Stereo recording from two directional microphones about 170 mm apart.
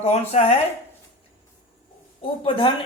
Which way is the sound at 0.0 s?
40° left (ahead or behind).